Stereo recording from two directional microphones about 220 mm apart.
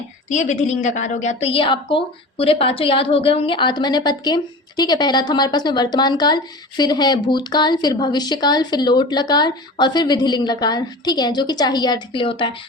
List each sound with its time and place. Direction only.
0.3 s a woman's voice: 30° left (ahead or behind)